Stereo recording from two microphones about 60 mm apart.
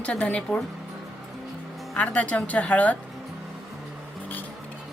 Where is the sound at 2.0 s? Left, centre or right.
Left.